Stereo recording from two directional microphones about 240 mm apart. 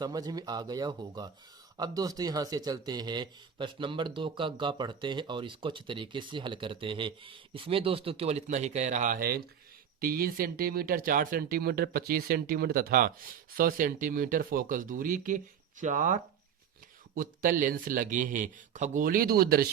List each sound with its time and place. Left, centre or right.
0.0 s speech: centre; by 19.6 s right